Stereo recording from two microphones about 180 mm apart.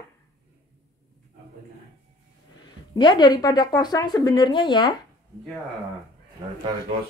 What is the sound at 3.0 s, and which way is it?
A woman's voice, 25° left (ahead or behind).